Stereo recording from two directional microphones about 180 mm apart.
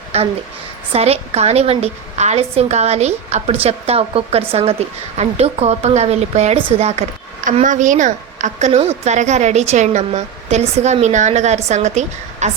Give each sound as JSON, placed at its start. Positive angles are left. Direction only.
{"t": 0.1, "sound": "a woman's voice", "side_deg": -35}
{"t": 7.4, "sound": "a woman's voice", "side_deg": -45}